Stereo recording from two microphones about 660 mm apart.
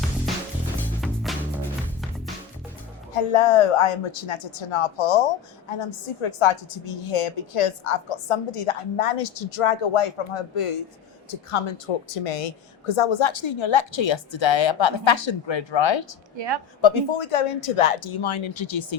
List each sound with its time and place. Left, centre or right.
0.8 s music: centre
3.2 s a woman's voice: left